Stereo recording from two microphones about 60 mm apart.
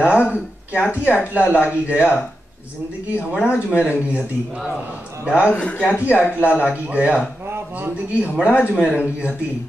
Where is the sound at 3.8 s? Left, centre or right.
Right.